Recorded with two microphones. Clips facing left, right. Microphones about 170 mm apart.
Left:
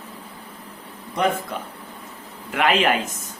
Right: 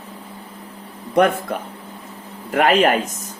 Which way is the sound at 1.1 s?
60° right (ahead or behind).